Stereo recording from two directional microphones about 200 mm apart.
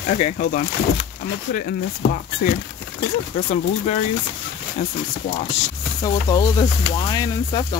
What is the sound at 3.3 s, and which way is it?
Speech, 25° left (ahead or behind).